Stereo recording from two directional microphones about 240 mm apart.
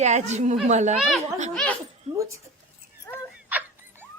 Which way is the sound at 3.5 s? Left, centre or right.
Centre.